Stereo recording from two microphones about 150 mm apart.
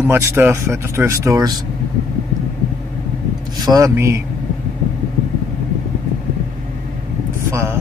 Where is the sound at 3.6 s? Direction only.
25° right (ahead or behind).